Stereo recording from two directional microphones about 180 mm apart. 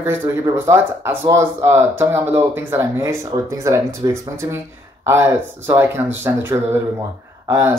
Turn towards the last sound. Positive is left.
turn(degrees=-15)  # may be behind; listen again after turning